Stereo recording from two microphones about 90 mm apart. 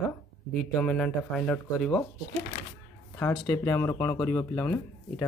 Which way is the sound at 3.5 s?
30° left (ahead or behind).